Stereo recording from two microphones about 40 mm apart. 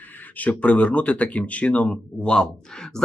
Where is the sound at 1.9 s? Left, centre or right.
Left.